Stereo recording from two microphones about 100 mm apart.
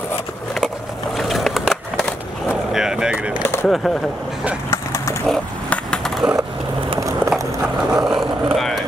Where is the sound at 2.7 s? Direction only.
5° right (ahead or behind).